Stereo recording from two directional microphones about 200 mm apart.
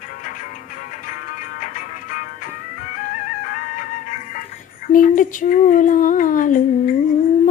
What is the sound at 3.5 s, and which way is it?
Music, 40° left (ahead or behind).